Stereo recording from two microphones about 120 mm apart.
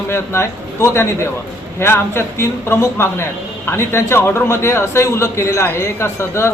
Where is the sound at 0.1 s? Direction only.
20° left (ahead or behind).